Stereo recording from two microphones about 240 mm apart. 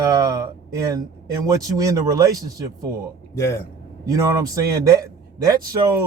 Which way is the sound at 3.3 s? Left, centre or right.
Centre.